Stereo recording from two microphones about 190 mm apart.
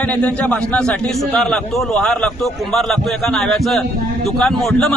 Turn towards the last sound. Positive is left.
turn(degrees=0)  # may be behind; listen again after turning